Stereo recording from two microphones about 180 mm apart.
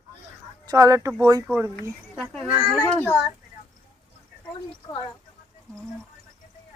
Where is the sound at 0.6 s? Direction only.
20° right (ahead or behind).